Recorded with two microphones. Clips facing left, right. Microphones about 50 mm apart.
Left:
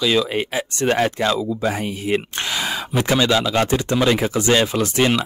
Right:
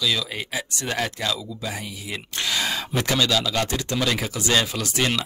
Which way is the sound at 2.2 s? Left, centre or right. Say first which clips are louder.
Left 3 dB; left.